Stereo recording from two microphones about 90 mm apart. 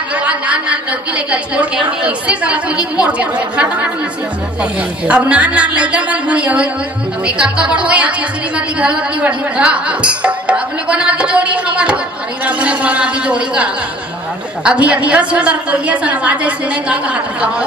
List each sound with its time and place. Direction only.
0.1 s a sound: 15° right (ahead or behind)
2.0 s speech: 15° right (ahead or behind)
5.0 s speech: 15° right (ahead or behind)